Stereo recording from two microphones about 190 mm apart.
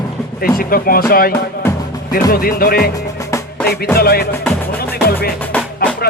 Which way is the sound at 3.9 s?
55° left (ahead or behind).